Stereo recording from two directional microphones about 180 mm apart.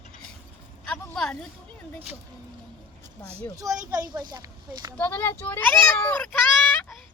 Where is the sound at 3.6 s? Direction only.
20° right (ahead or behind).